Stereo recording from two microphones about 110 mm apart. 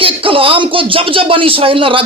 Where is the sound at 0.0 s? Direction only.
55° right (ahead or behind).